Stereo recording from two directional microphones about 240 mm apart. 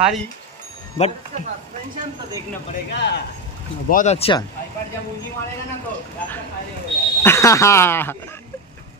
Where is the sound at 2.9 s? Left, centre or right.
Left.